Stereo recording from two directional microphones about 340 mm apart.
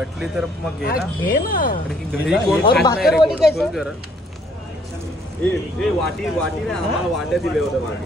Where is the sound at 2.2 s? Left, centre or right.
Centre.